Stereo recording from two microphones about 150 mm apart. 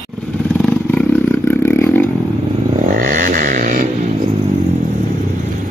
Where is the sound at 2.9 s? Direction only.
65° right (ahead or behind).